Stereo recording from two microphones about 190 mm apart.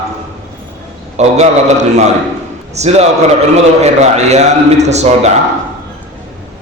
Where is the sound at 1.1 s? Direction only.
35° right (ahead or behind).